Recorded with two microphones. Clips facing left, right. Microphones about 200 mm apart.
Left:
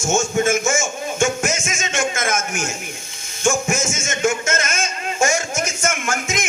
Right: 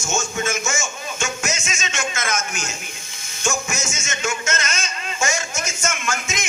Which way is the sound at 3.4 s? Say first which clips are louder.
Left 6 dB; 55° left (ahead or behind).